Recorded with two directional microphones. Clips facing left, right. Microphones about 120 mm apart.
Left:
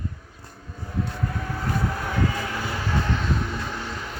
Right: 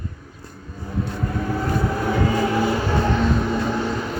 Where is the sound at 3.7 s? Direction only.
70° right (ahead or behind).